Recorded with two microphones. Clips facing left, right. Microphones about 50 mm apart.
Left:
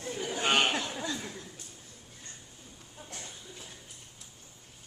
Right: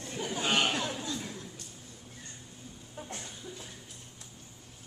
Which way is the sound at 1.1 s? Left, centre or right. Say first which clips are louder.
Even; centre.